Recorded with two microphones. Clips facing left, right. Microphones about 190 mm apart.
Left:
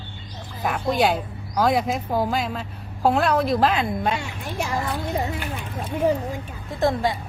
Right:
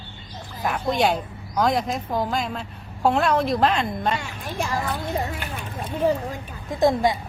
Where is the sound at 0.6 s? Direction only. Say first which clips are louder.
Left 1 dB; centre (ahead or behind).